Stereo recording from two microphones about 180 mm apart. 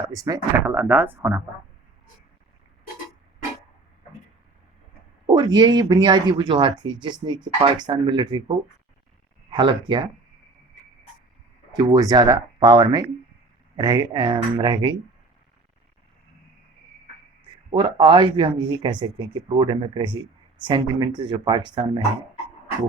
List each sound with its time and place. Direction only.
0.1 s speech: 20° right (ahead or behind)
5.2 s speech: 25° right (ahead or behind)
11.7 s speech: 25° right (ahead or behind)
17.7 s speech: 25° right (ahead or behind)